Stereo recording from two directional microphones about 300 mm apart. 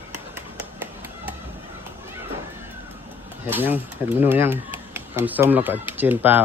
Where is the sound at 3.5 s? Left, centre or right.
Centre.